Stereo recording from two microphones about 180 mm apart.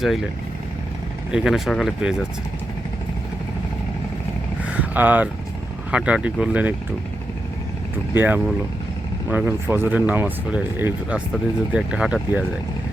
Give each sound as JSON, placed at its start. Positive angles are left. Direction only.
{"t": 0.0, "sound": "speech", "side_deg": 0}
{"t": 1.3, "sound": "speech", "side_deg": 0}
{"t": 4.7, "sound": "speech", "side_deg": -10}
{"t": 8.1, "sound": "speech", "side_deg": -10}